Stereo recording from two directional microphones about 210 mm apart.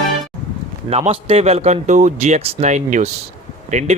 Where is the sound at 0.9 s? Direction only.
30° right (ahead or behind).